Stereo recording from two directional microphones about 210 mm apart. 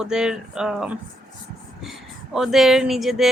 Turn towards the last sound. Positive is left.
turn(degrees=0)  # may be behind; listen again after turning